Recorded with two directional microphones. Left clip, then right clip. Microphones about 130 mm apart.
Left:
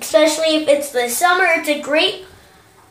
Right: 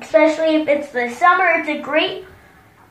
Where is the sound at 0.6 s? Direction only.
25° left (ahead or behind).